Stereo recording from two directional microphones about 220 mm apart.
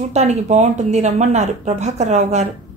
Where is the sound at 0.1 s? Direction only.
30° right (ahead or behind).